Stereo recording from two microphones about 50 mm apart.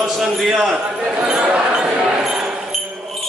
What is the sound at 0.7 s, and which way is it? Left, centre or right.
Basketball bounce, centre.